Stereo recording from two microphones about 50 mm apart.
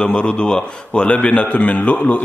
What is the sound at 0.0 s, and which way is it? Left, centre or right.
Speech, left.